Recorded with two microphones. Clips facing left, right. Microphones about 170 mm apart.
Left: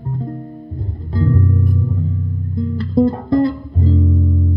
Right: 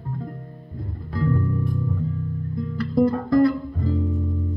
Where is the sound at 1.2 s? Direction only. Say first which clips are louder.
Left 4 dB; 20° left (ahead or behind).